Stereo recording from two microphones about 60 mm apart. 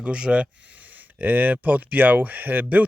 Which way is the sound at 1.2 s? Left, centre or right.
Right.